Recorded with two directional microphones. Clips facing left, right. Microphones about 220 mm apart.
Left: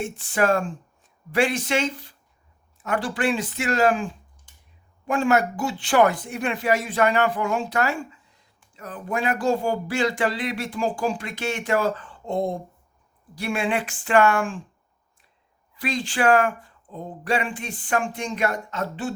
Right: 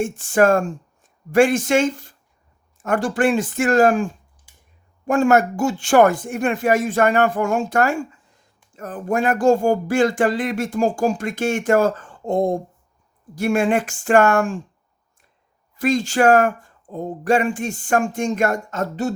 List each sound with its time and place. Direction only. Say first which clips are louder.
0.0 s speech: right 7 dB; 45° right (ahead or behind)
15.7 s speech: right 8 dB; 45° right (ahead or behind)